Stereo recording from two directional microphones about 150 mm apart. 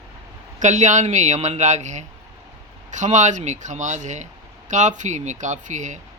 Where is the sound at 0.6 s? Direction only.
55° right (ahead or behind).